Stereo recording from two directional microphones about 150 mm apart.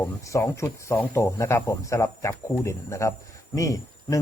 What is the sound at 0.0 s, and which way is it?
Speech, 20° left (ahead or behind).